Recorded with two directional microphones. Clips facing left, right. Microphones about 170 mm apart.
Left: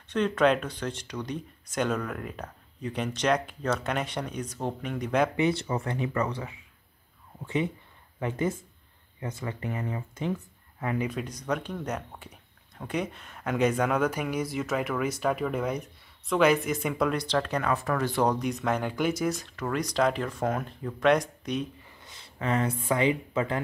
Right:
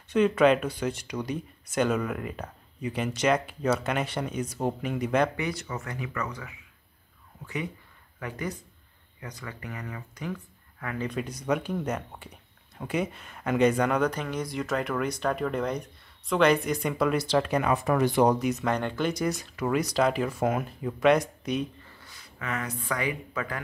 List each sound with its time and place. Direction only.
0.1 s speech: 5° right (ahead or behind)
5.3 s speech: 25° left (ahead or behind)
11.1 s speech: 5° right (ahead or behind)
21.8 s speech: 20° left (ahead or behind)